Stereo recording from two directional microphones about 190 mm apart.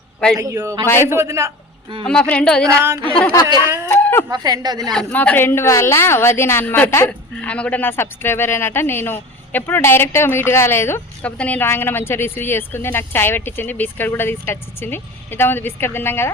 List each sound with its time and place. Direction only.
0.3 s a man's voice: 15° right (ahead or behind)
0.9 s a woman's voice: 15° left (ahead or behind)
1.1 s a man's voice: 15° right (ahead or behind)
2.0 s a woman's voice: 5° left (ahead or behind)
2.6 s a man's voice: 15° right (ahead or behind)
3.0 s a woman's voice: 5° left (ahead or behind)
3.8 s a sound: 10° left (ahead or behind)
4.3 s speech: 20° right (ahead or behind)
4.9 s a woman's voice: 10° left (ahead or behind)